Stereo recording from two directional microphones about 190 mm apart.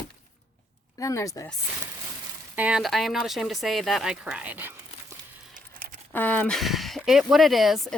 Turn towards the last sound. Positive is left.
turn(degrees=0)  # may be behind; listen again after turning